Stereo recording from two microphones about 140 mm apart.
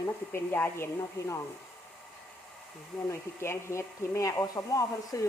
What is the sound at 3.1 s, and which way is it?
Speech, 20° left (ahead or behind).